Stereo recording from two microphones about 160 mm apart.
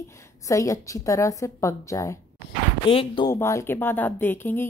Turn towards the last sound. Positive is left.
turn(degrees=10)  # may be behind; listen again after turning